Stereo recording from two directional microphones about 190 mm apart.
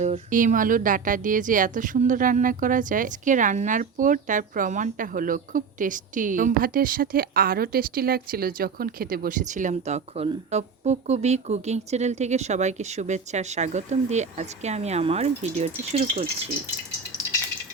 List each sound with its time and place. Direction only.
0.0 s a woman's voice: 40° right (ahead or behind)